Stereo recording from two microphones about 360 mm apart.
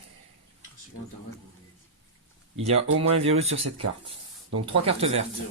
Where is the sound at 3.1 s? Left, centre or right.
Centre.